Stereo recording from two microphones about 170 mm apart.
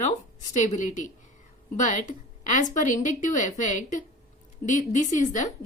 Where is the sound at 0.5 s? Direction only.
45° left (ahead or behind).